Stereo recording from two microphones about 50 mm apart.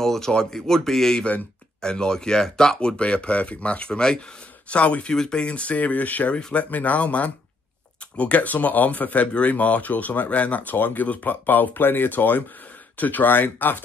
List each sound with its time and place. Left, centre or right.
0.0 s speech: centre
3.0 s speech: left
5.1 s speech: centre
5.4 s speech: left